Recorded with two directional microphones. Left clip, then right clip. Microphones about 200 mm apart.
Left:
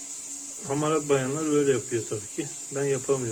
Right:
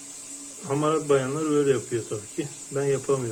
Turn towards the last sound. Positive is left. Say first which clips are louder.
# right 2 dB
turn(degrees=15)  # may be behind; listen again after turning